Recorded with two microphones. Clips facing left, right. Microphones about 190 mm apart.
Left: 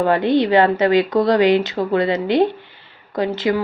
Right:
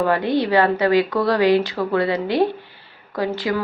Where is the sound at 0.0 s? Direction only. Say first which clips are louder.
Left 3 dB; 25° left (ahead or behind).